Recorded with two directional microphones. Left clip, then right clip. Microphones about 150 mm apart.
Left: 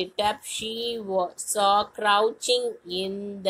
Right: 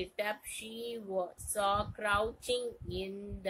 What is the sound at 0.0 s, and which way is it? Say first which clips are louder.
Speech: left 11 dB; 20° left (ahead or behind).